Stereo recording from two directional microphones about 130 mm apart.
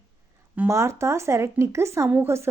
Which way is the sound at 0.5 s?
15° right (ahead or behind).